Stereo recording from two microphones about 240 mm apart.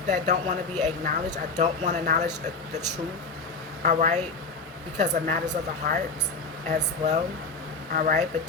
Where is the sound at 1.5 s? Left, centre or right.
Right.